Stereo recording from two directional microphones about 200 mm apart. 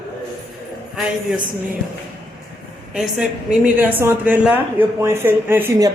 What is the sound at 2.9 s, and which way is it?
A woman's voice, 5° right (ahead or behind).